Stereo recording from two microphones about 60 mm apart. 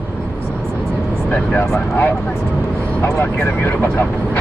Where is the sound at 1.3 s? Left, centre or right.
Left.